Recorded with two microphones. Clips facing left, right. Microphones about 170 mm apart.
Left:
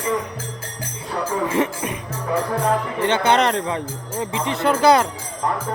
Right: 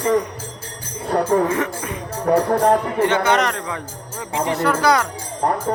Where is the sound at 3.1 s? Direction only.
30° left (ahead or behind).